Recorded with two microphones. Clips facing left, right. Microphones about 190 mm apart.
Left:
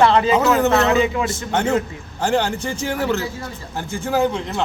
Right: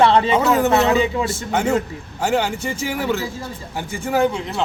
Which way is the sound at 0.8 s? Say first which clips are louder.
Even; 30° right (ahead or behind).